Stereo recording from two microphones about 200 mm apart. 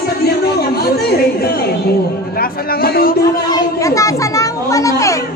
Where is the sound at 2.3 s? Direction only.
50° left (ahead or behind).